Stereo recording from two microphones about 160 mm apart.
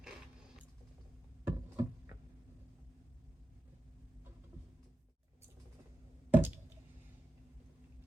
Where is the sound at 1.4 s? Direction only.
15° right (ahead or behind).